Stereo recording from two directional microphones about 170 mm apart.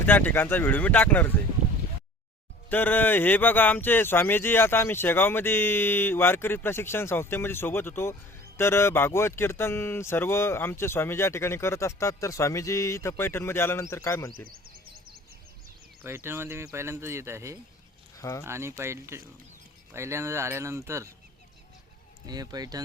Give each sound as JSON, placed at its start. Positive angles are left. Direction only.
{"t": 0.0, "sound": "speech", "side_deg": 10}
{"t": 2.6, "sound": "speech", "side_deg": 10}
{"t": 14.3, "sound": "music", "side_deg": -60}
{"t": 16.0, "sound": "speech", "side_deg": -15}
{"t": 18.2, "sound": "speech", "side_deg": 20}
{"t": 18.4, "sound": "speech", "side_deg": -15}
{"t": 22.3, "sound": "speech", "side_deg": -20}